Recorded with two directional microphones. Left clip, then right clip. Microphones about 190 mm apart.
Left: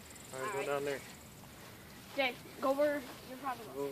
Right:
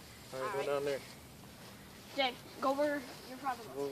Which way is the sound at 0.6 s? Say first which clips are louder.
Right 1 dB; 25° left (ahead or behind).